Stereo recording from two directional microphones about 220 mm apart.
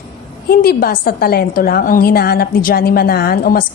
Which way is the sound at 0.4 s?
45° left (ahead or behind).